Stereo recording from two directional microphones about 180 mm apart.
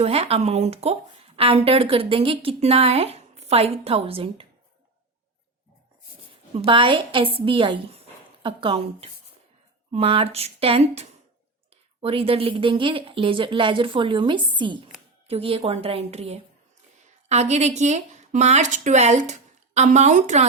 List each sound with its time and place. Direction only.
0.0 s speech: 35° right (ahead or behind)
6.7 s a woman's voice: 30° right (ahead or behind)